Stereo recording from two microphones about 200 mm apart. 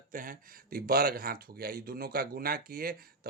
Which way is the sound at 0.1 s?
45° right (ahead or behind).